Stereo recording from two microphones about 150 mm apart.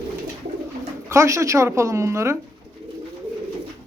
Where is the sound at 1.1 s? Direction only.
20° right (ahead or behind).